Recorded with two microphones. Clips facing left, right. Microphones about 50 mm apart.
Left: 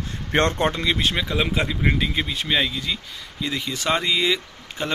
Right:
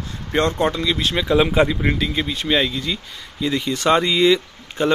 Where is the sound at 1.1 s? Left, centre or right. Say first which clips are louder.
Right 7 dB; centre.